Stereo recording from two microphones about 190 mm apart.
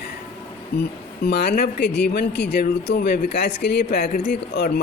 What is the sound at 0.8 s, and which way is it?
Speech, 55° left (ahead or behind).